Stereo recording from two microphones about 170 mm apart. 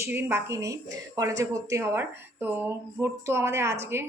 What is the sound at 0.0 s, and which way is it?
Speech, 15° right (ahead or behind).